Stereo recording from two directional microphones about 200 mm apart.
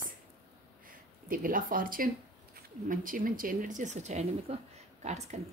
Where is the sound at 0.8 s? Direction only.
45° right (ahead or behind).